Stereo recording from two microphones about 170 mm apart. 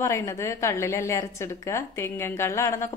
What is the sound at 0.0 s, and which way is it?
A woman's voice, 15° left (ahead or behind).